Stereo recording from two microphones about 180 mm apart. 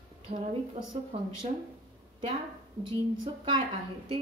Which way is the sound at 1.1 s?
30° right (ahead or behind).